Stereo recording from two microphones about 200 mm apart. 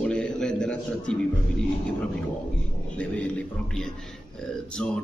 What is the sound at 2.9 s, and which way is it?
A man's voice, 5° left (ahead or behind).